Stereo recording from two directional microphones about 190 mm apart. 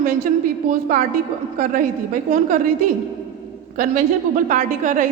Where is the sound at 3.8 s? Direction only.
40° right (ahead or behind).